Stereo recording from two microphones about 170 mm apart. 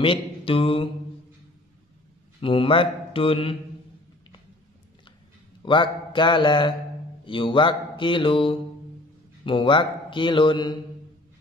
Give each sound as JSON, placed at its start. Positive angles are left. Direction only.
{"t": 0.0, "sound": "mantra", "side_deg": 30}
{"t": 2.4, "sound": "speech", "side_deg": 30}
{"t": 5.7, "sound": "a man's voice", "side_deg": 25}